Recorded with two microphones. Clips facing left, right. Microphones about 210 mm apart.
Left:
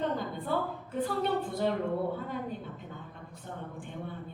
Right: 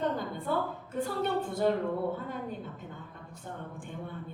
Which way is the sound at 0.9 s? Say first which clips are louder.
Left 1 dB; 50° right (ahead or behind).